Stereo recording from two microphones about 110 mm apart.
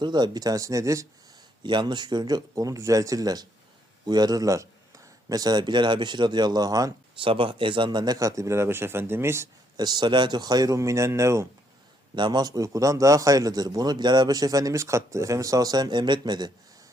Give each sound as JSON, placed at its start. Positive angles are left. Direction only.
{"t": 0.0, "sound": "a man's voice", "side_deg": -40}
{"t": 1.6, "sound": "a man's voice", "side_deg": -45}
{"t": 7.2, "sound": "a man's voice", "side_deg": -50}
{"t": 9.7, "sound": "a man's voice", "side_deg": -40}
{"t": 12.1, "sound": "a man's voice", "side_deg": -45}